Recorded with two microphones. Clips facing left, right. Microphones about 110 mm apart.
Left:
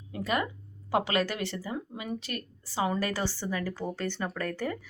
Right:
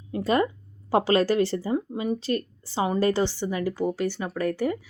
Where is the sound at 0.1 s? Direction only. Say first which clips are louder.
Right 7 dB; 35° right (ahead or behind).